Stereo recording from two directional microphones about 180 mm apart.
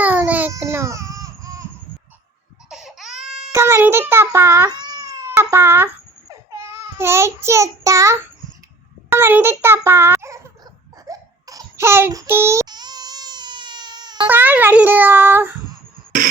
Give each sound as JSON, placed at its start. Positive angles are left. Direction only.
{"t": 0.0, "sound": "baby cry", "side_deg": -10}
{"t": 2.6, "sound": "baby cry", "side_deg": -5}
{"t": 3.5, "sound": "cat", "side_deg": -15}
{"t": 6.5, "sound": "a child's voice", "side_deg": -15}
{"t": 11.0, "sound": "babbling", "side_deg": -20}
{"t": 14.3, "sound": "a child's voice", "side_deg": -10}